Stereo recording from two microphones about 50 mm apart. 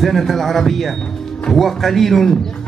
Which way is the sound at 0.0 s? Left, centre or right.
Centre.